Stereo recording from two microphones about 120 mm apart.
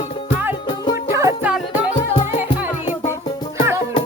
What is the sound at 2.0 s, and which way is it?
Music, 65° left (ahead or behind).